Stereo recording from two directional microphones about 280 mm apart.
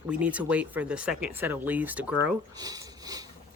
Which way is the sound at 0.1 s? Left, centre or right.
Centre.